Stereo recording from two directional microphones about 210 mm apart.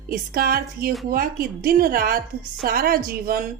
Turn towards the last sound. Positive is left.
turn(degrees=-45)  # may be behind; listen again after turning